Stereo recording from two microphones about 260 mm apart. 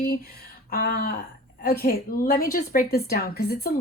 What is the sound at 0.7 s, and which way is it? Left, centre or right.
A woman's voice, left.